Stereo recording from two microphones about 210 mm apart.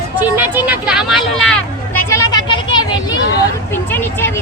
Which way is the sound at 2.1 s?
20° left (ahead or behind).